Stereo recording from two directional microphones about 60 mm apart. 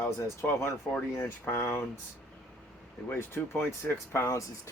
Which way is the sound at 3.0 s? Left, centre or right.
Left.